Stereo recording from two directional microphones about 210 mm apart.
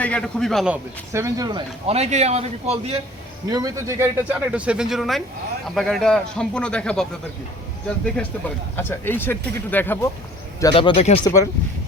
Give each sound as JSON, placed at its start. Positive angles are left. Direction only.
{"t": 0.0, "sound": "a man's voice", "side_deg": 5}
{"t": 3.5, "sound": "speech", "side_deg": -15}
{"t": 10.6, "sound": "a man's voice", "side_deg": 20}